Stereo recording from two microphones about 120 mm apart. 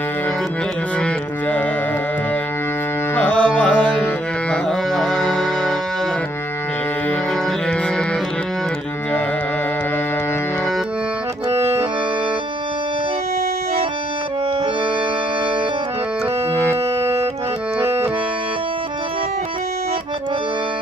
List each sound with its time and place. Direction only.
3.2 s music: 10° left (ahead or behind)
11.5 s music: 20° right (ahead or behind)
17.0 s music: 20° right (ahead or behind)